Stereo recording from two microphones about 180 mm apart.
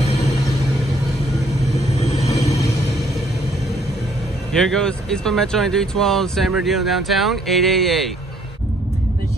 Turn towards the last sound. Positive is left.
turn(degrees=0)  # may be behind; listen again after turning